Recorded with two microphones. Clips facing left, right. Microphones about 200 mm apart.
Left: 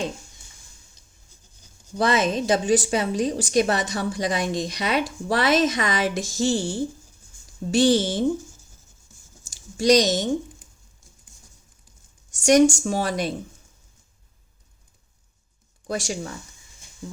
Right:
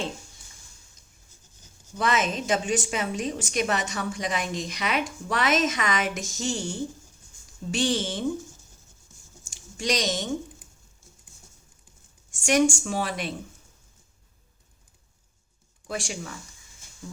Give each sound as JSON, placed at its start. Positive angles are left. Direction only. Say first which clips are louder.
{"t": 2.0, "sound": "a woman's voice", "louder": "left 5 dB", "side_deg": 35}
{"t": 9.4, "sound": "a sound", "louder": "left 9 dB", "side_deg": 40}
{"t": 12.3, "sound": "a woman's voice", "louder": "left 6 dB", "side_deg": 40}
{"t": 15.9, "sound": "a woman's voice", "louder": "left 5 dB", "side_deg": 40}